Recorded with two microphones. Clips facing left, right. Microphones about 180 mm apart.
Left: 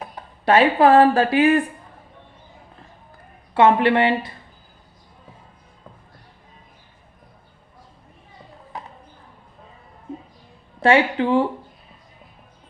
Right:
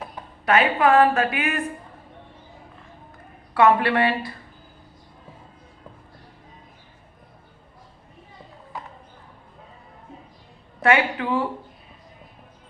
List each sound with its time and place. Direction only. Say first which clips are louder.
0.4 s a woman's voice: left 4 dB; 30° left (ahead or behind)
3.5 s speech: left 3 dB; 25° left (ahead or behind)
10.8 s speech: left 4 dB; 30° left (ahead or behind)